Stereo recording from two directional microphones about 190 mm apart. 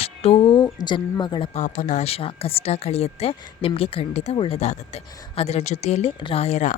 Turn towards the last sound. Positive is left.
turn(degrees=40)  # may be behind; listen again after turning